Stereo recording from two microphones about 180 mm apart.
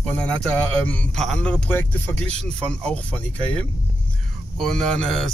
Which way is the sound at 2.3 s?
35° right (ahead or behind).